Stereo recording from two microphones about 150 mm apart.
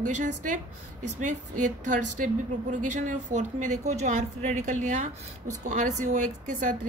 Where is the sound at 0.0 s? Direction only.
60° right (ahead or behind).